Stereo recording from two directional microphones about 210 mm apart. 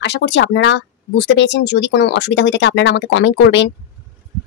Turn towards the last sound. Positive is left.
turn(degrees=60)  # may be behind; listen again after turning